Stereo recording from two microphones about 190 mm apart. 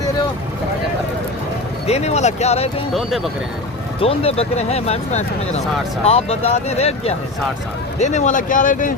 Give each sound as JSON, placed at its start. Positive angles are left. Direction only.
{"t": 1.9, "sound": "speech", "side_deg": 35}
{"t": 4.0, "sound": "speech", "side_deg": 30}